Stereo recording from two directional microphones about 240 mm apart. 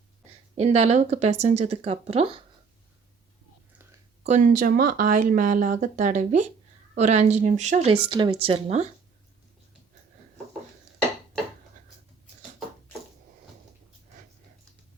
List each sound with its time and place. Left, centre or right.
0.5 s speech: right
4.2 s speech: right